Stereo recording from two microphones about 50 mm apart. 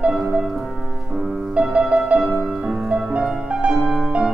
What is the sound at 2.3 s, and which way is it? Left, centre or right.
Music, right.